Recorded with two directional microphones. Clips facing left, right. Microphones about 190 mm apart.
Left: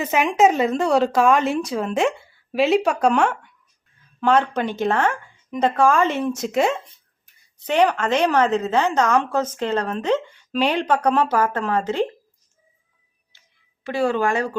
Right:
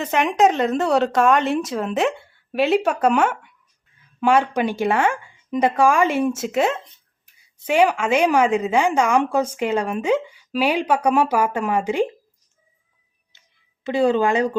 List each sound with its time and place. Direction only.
0.0 s a woman's voice: 5° left (ahead or behind); by 12.0 s 15° right (ahead or behind)
13.8 s speech: 20° right (ahead or behind)